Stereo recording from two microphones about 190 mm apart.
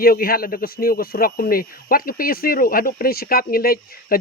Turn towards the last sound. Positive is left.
turn(degrees=50)  # may be behind; listen again after turning